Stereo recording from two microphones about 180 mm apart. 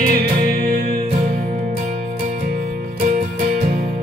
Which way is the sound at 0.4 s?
50° right (ahead or behind).